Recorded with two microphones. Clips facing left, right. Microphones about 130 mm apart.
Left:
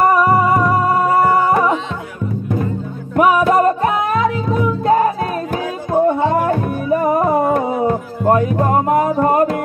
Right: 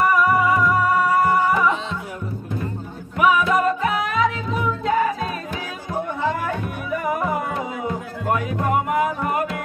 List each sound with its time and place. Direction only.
0.0 s music: 40° left (ahead or behind)
0.7 s music: 25° left (ahead or behind)
1.2 s music: 55° left (ahead or behind)
3.2 s music: 45° left (ahead or behind)